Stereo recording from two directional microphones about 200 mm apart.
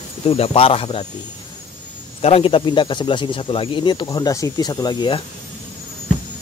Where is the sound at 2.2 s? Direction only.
30° left (ahead or behind).